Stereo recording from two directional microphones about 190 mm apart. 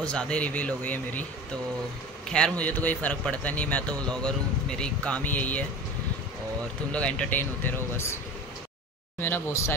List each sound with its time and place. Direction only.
0.0 s a man's voice: 5° left (ahead or behind)
2.2 s a man's voice: 5° left (ahead or behind)
6.9 s a man's voice: 5° left (ahead or behind)
9.2 s a man's voice: 10° left (ahead or behind)